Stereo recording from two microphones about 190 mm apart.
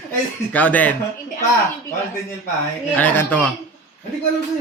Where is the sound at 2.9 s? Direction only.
10° left (ahead or behind).